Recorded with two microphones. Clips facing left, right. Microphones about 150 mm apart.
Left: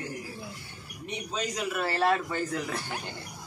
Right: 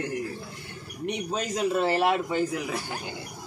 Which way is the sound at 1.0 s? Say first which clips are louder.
Right 4 dB; 55° right (ahead or behind).